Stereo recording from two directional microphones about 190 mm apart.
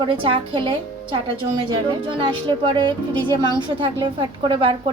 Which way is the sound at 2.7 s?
25° right (ahead or behind).